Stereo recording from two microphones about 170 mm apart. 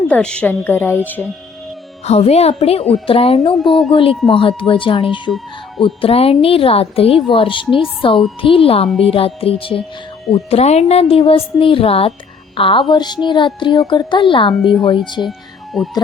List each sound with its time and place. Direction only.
0.1 s a woman's voice: 5° left (ahead or behind)
2.0 s a woman's voice: 40° left (ahead or behind)
3.5 s speech: centre (ahead or behind)
3.9 s a woman's voice: 30° left (ahead or behind)
15.3 s music: centre (ahead or behind)